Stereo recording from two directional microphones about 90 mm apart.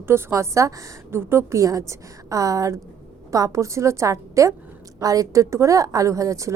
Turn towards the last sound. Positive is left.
turn(degrees=-35)  # may be behind; listen again after turning